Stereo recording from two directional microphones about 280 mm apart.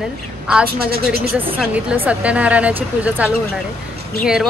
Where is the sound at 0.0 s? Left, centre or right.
Centre.